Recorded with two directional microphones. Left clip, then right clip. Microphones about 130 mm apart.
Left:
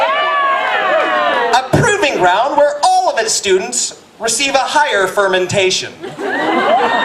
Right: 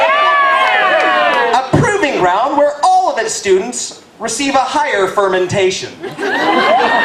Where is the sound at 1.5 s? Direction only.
40° left (ahead or behind).